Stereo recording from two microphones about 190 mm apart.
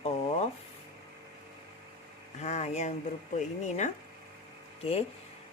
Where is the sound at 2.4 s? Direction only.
35° left (ahead or behind).